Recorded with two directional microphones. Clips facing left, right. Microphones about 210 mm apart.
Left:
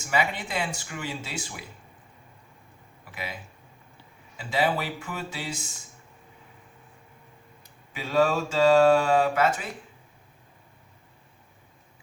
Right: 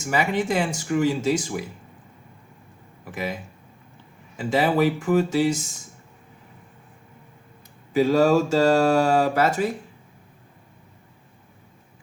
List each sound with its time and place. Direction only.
0.0 s speech: 45° right (ahead or behind)
3.0 s speech: 45° right (ahead or behind)
4.4 s speech: 45° right (ahead or behind)
7.9 s speech: 40° right (ahead or behind)